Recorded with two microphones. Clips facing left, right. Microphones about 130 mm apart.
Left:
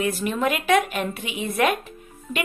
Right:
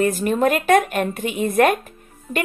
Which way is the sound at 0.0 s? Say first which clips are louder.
Right 5 dB; 45° right (ahead or behind).